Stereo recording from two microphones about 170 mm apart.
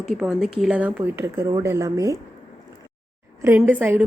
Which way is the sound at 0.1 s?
5° right (ahead or behind).